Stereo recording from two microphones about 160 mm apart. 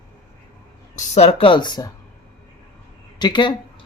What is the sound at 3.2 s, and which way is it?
Speech, 30° left (ahead or behind).